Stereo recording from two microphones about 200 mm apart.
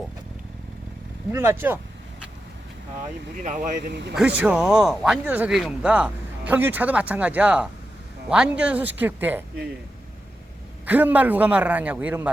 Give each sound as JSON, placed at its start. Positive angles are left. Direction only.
{"t": 1.3, "sound": "speech", "side_deg": -15}
{"t": 3.3, "sound": "speech", "side_deg": -40}
{"t": 3.8, "sound": "speech", "side_deg": -55}
{"t": 4.1, "sound": "speech", "side_deg": -5}
{"t": 10.8, "sound": "speech", "side_deg": -10}